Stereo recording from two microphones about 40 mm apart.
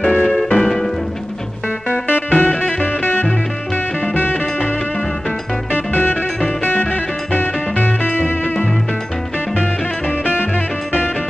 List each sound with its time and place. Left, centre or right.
0.3 s music: centre
1.9 s music: left
5.7 s music: left